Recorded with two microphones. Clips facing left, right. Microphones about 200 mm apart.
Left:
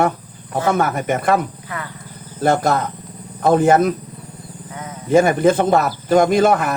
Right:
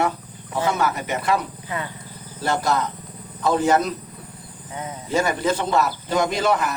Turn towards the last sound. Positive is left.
turn(degrees=50)  # may be behind; listen again after turning